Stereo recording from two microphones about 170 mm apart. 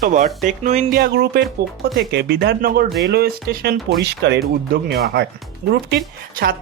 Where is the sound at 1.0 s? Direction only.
80° right.